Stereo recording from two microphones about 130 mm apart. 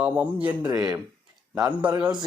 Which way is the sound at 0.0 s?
10° right (ahead or behind).